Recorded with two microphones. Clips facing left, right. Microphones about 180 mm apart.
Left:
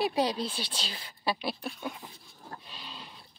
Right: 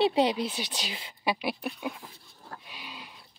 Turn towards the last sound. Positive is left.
turn(degrees=-10)  # may be behind; listen again after turning